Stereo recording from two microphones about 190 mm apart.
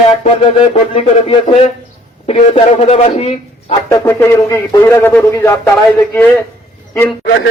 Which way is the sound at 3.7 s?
15° left (ahead or behind).